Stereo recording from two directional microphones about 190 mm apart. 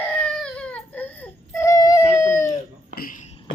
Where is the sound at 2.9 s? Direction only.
50° left (ahead or behind).